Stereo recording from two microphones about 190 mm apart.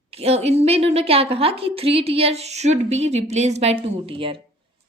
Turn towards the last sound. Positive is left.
turn(degrees=-25)  # may be behind; listen again after turning